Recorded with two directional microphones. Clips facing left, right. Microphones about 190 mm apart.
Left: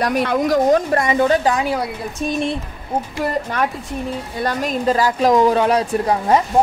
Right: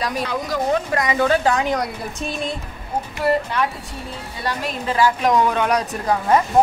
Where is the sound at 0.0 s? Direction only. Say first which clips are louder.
Left 7 dB; 60° left (ahead or behind).